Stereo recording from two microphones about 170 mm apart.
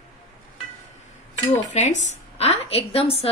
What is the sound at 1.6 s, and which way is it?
A woman's voice, 45° left (ahead or behind).